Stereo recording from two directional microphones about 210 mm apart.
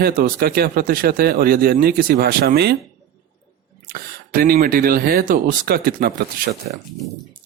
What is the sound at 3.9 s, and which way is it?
Speech, 45° right (ahead or behind).